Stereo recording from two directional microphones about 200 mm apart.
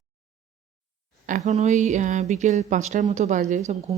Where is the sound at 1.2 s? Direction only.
40° right (ahead or behind).